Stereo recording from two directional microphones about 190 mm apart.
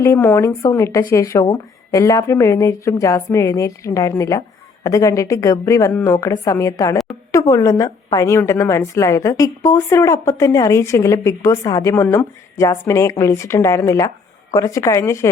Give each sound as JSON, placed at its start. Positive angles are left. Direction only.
{"t": 0.0, "sound": "a woman's voice", "side_deg": 15}